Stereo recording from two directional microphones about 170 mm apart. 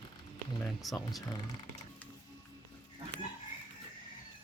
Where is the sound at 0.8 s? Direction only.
Centre (ahead or behind).